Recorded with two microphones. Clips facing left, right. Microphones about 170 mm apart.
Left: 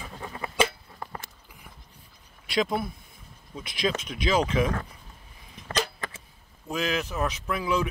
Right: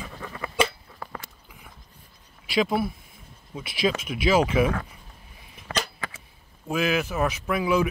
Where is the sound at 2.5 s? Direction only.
5° right (ahead or behind).